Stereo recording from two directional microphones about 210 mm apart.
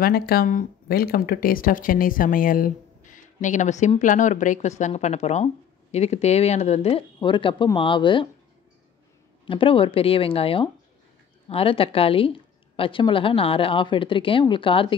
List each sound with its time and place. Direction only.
0.0 s speech: 45° left (ahead or behind); by 8.3 s 25° left (ahead or behind)
9.5 s a woman's voice: 25° left (ahead or behind)